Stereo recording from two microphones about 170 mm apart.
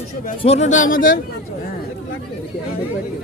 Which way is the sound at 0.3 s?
40° left (ahead or behind).